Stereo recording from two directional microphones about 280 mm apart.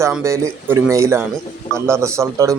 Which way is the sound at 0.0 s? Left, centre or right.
Centre.